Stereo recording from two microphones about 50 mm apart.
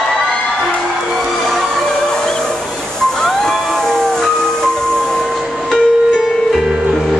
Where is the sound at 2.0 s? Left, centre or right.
Centre.